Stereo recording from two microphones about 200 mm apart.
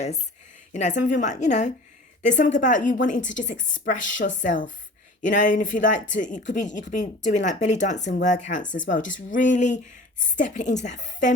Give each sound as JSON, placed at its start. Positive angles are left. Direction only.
{"t": 0.7, "sound": "a woman's voice", "side_deg": 35}